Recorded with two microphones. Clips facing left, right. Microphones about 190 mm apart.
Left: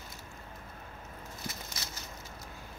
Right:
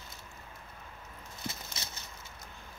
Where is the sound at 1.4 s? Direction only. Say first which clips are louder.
Right 2 dB; 25° right (ahead or behind).